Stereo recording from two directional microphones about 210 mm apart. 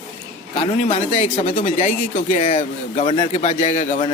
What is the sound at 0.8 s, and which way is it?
Speech, 30° left (ahead or behind).